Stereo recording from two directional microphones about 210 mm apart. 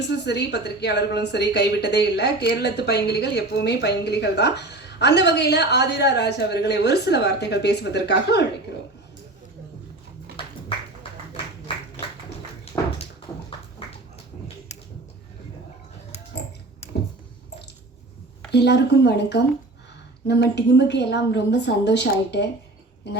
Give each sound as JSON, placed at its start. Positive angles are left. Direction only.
{"t": 0.1, "sound": "a woman's voice", "side_deg": 55}
{"t": 12.7, "sound": "a sound", "side_deg": 15}
{"t": 18.5, "sound": "a woman's voice", "side_deg": 55}